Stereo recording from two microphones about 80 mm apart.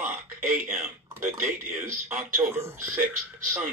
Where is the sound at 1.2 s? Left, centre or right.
Right.